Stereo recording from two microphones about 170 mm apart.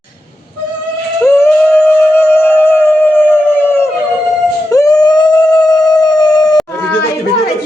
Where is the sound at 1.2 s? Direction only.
10° left (ahead or behind).